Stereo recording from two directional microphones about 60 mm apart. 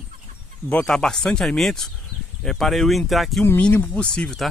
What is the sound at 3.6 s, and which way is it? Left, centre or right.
Speech, left.